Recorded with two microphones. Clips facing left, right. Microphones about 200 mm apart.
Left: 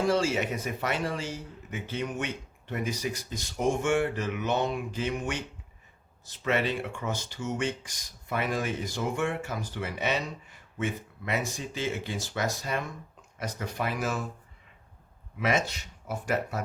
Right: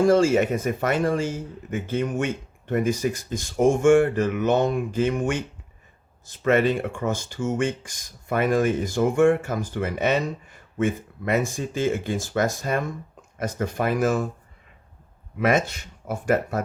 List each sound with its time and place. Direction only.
0.0 s speech: 50° right (ahead or behind)
15.4 s speech: 50° right (ahead or behind)